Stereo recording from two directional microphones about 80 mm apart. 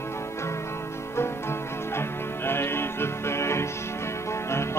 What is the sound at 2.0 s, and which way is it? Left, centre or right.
Music, left.